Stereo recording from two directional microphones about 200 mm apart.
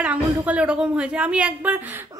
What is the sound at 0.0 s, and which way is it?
Speech, 5° right (ahead or behind).